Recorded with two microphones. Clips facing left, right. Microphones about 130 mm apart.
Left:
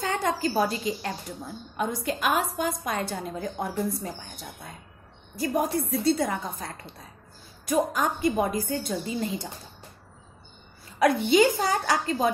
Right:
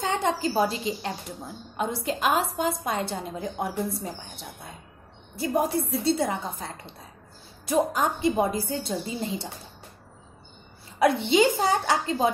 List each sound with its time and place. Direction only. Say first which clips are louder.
0.0 s a woman's voice: right 1 dB; 20° right (ahead or behind)
5.3 s a woman's voice: right 1 dB; 25° right (ahead or behind)
7.9 s a woman's voice: right 1 dB; 25° right (ahead or behind)
11.0 s a woman's voice: even; 25° right (ahead or behind)